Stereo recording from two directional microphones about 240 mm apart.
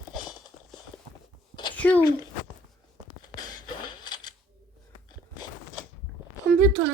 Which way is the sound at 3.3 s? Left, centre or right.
Centre.